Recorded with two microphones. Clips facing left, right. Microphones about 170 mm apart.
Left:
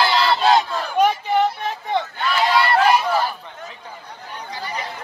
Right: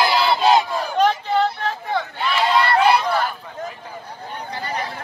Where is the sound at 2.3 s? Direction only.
Centre (ahead or behind).